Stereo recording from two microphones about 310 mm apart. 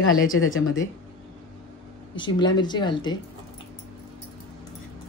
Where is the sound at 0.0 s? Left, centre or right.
Left.